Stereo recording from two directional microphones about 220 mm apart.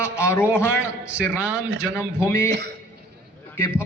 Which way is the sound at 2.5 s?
50° right (ahead or behind).